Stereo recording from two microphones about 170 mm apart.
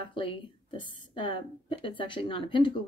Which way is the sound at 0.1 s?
30° left (ahead or behind).